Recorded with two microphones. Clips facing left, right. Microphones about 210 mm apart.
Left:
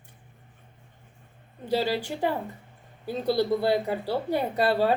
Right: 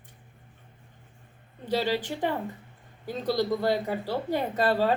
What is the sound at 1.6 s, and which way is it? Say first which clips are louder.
Speech: left 1 dB; 10° left (ahead or behind).